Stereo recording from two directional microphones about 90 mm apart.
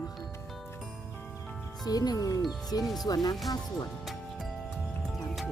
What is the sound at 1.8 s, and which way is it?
Speech, 45° left (ahead or behind).